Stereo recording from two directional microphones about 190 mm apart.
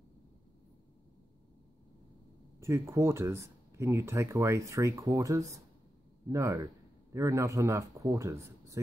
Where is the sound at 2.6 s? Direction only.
15° right (ahead or behind).